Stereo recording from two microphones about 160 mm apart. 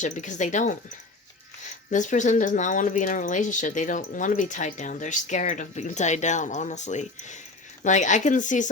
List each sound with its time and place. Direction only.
0.0 s speech: 50° left (ahead or behind)